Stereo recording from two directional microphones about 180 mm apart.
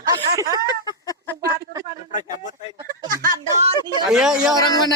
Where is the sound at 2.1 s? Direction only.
45° left (ahead or behind).